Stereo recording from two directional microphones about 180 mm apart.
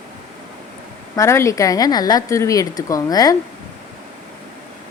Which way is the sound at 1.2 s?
15° left (ahead or behind).